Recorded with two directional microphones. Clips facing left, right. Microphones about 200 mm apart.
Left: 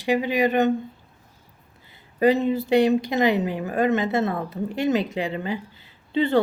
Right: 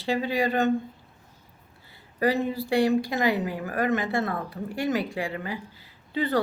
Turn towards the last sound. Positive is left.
turn(degrees=25)  # may be behind; listen again after turning